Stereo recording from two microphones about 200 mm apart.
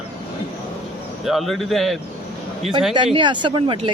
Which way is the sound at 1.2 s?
Centre (ahead or behind).